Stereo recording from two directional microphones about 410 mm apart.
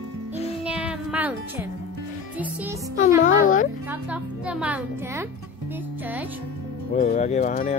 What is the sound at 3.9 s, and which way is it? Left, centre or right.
Speech, centre.